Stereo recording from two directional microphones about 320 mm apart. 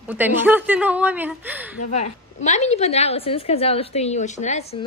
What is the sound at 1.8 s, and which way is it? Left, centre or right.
A woman's voice, left.